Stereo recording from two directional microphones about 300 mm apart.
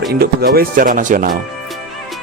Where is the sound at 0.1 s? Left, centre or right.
Right.